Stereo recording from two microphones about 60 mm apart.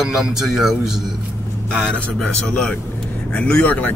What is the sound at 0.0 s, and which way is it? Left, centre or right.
Speech, centre.